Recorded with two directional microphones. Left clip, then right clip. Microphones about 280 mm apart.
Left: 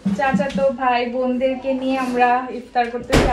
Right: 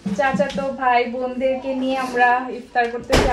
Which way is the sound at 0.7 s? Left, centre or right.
Right.